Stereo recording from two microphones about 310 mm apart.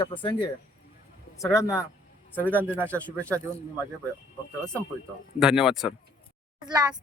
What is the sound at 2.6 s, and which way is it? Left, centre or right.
Speech, centre.